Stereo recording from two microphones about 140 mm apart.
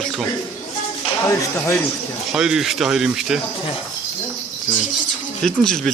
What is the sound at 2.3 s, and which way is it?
Speech, 5° right (ahead or behind).